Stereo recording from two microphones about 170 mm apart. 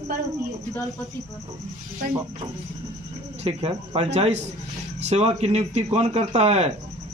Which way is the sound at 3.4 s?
35° right (ahead or behind).